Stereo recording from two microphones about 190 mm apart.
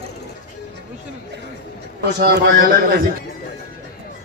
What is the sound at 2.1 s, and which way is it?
Speech, 60° right (ahead or behind).